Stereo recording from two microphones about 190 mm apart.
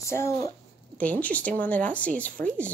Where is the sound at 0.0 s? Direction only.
15° left (ahead or behind).